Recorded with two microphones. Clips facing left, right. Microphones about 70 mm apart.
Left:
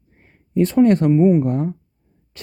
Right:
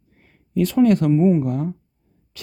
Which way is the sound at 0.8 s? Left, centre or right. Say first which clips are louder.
Left 1 dB; left.